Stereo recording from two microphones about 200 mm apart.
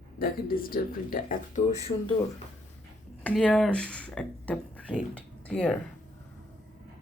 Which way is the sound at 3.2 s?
5° left (ahead or behind).